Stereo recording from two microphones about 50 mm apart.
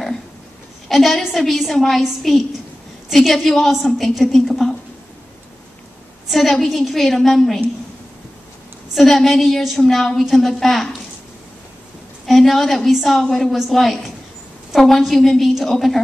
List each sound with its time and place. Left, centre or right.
0.8 s a woman's voice: centre
6.2 s a woman's voice: centre
8.9 s a woman's voice: centre
12.3 s a woman's voice: centre